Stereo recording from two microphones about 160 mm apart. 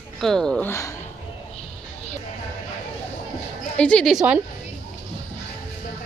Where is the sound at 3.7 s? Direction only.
5° left (ahead or behind).